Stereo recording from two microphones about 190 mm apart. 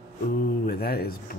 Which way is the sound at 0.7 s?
55° left (ahead or behind).